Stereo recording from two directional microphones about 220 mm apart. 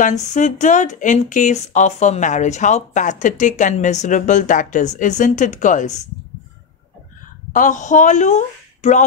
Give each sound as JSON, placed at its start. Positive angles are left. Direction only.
{"t": 0.0, "sound": "speech", "side_deg": 35}
{"t": 7.5, "sound": "speech", "side_deg": 35}